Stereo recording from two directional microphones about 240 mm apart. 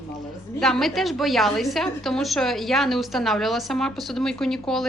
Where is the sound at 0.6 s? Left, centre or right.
Centre.